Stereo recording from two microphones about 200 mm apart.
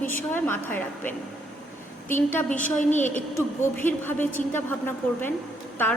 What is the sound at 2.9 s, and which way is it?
Speech, 35° left (ahead or behind).